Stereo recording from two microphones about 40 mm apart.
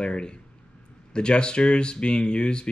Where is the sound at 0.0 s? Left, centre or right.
Left.